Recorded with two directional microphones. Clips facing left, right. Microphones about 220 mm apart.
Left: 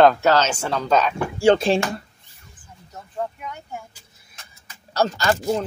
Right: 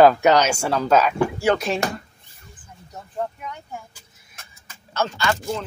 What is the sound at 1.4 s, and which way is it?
Speech, 30° left (ahead or behind).